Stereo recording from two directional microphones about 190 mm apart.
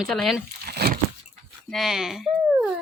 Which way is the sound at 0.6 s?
55° right (ahead or behind).